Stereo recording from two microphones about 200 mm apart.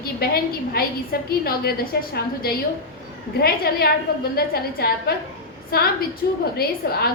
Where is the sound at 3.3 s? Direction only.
50° left (ahead or behind).